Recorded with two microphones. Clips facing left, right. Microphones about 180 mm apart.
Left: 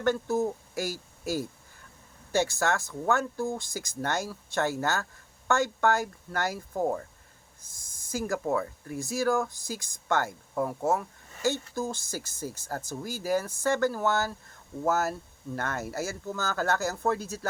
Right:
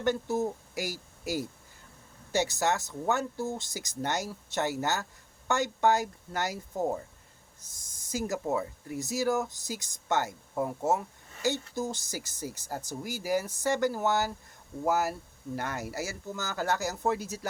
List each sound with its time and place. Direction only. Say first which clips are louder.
0.0 s speech: left 2 dB; 20° right (ahead or behind)
8.1 s speech: left 2 dB; 20° right (ahead or behind)